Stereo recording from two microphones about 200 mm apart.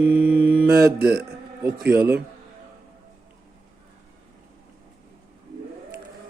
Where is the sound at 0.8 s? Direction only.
50° right (ahead or behind).